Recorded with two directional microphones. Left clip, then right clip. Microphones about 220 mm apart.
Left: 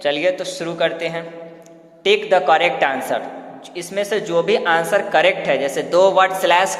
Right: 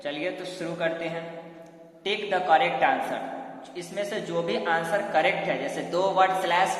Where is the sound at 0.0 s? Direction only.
45° left (ahead or behind).